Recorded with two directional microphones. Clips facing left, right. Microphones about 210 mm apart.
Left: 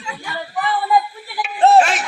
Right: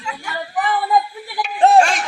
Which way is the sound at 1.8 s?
Centre (ahead or behind).